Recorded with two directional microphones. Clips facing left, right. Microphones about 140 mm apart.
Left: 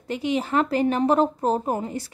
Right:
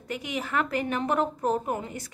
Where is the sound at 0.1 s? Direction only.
30° left (ahead or behind).